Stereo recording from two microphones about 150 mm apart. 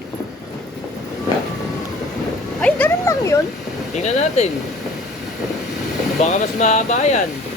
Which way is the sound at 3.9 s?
50° left (ahead or behind).